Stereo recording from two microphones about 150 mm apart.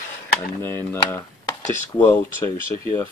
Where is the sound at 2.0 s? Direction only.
15° left (ahead or behind).